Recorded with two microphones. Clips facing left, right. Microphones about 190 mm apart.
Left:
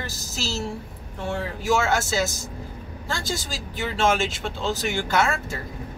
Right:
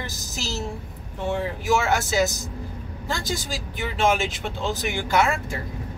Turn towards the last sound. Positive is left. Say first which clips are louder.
# right 1 dB
turn(degrees=-15)  # may be behind; listen again after turning